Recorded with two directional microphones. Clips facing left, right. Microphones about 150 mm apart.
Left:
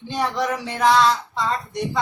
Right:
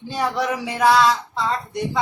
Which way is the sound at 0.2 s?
10° right (ahead or behind).